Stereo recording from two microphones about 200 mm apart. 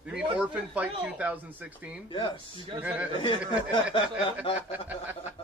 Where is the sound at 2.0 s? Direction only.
25° left (ahead or behind).